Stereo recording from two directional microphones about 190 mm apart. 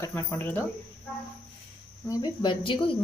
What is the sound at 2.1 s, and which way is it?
Speech, 20° left (ahead or behind).